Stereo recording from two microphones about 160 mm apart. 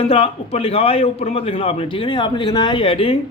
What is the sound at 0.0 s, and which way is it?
A man's voice, 35° left (ahead or behind).